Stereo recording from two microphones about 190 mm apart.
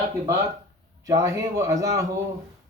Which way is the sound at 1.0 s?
15° right (ahead or behind).